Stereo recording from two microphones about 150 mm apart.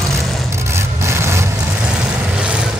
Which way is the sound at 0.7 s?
15° right (ahead or behind).